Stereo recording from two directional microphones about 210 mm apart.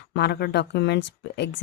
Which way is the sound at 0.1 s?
50° left (ahead or behind).